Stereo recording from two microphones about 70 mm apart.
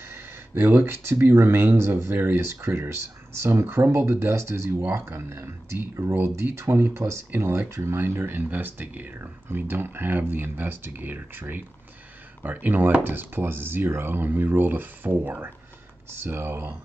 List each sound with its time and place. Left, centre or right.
0.1 s speech: right